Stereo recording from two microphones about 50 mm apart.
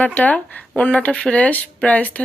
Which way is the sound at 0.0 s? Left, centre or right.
Left.